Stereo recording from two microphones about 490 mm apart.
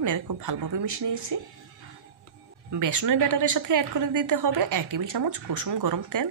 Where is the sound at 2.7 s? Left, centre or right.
Right.